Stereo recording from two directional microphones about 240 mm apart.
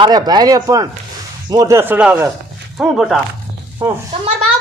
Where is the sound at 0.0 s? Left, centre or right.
Centre.